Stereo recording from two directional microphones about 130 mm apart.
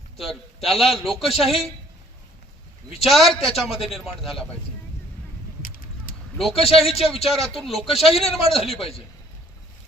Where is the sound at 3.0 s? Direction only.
Centre (ahead or behind).